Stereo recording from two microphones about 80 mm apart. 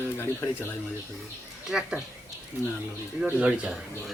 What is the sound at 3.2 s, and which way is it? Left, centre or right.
Speech, centre.